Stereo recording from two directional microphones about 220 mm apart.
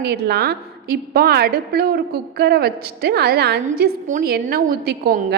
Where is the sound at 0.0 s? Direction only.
45° right (ahead or behind).